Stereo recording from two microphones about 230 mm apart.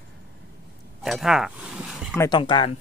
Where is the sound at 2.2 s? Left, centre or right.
Centre.